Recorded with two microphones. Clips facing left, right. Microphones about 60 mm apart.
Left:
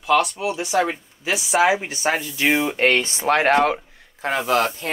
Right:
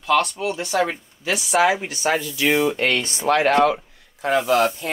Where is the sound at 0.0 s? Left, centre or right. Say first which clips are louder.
Left 1 dB; centre.